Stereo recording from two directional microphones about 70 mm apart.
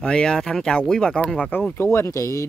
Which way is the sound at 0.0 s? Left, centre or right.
Centre.